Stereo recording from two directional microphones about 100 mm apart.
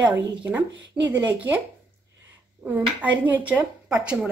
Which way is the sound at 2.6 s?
15° right (ahead or behind).